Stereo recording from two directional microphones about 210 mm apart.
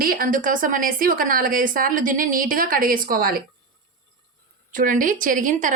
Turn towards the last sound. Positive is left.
turn(degrees=-40)  # may be behind; listen again after turning